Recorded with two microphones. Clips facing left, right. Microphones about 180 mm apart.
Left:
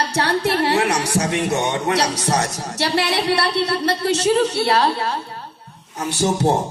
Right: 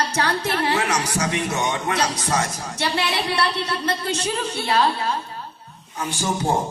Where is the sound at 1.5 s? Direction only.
70° left (ahead or behind).